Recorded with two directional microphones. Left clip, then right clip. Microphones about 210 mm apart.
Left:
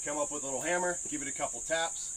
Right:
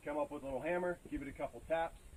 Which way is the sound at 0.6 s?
5° left (ahead or behind).